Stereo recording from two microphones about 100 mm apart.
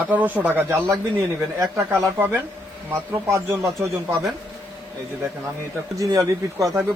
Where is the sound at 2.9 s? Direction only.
20° right (ahead or behind).